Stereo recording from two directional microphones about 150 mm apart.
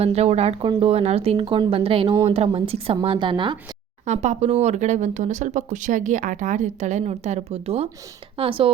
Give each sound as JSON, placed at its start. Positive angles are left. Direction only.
{"t": 0.0, "sound": "speech", "side_deg": -45}
{"t": 4.0, "sound": "speech", "side_deg": -50}